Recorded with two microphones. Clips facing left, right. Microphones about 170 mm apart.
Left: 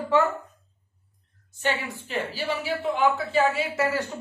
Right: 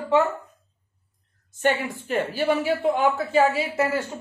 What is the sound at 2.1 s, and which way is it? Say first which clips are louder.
A woman's voice: right 6 dB; 50° right (ahead or behind).